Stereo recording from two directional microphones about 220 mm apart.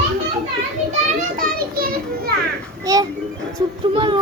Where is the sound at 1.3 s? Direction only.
40° right (ahead or behind).